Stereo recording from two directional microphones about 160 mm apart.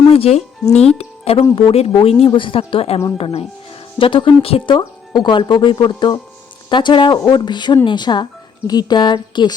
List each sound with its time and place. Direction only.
0.1 s speech: 40° left (ahead or behind)